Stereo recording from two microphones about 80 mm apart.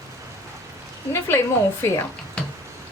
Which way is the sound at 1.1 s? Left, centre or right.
Left.